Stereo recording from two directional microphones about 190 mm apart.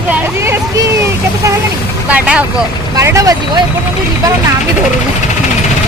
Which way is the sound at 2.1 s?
5° right (ahead or behind).